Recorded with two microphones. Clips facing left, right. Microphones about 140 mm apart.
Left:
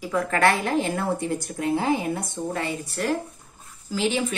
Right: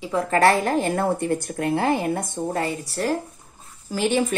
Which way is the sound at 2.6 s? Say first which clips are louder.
Right 2 dB; 35° right (ahead or behind).